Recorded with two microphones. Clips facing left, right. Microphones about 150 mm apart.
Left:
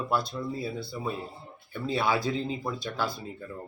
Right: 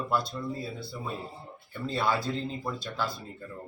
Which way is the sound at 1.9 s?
5° left (ahead or behind).